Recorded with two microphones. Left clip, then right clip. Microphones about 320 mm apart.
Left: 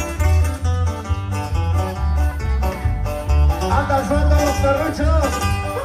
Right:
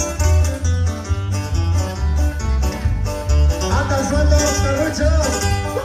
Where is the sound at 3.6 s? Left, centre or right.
Centre.